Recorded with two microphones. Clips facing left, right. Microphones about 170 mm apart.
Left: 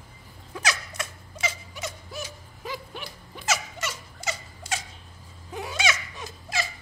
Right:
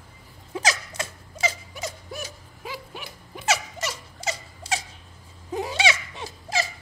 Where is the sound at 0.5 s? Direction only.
35° right (ahead or behind).